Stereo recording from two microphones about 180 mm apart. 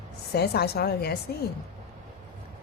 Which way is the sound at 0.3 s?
60° left (ahead or behind).